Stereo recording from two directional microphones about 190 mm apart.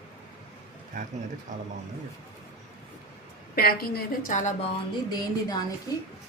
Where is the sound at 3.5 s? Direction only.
50° left (ahead or behind).